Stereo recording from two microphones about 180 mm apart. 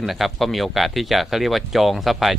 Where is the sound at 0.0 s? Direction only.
Centre (ahead or behind).